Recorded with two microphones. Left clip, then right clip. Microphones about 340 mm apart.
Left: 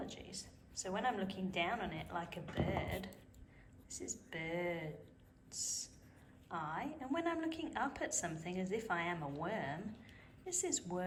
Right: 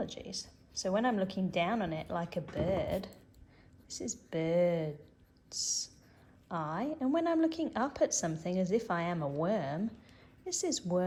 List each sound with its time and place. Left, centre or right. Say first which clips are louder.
0.0 s a woman's voice: right 8 dB; centre